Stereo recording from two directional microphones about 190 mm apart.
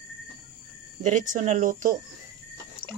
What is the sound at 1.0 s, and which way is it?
Speech, 40° right (ahead or behind).